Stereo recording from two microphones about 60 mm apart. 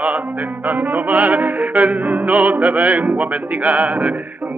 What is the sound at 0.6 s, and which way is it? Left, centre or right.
Music, right.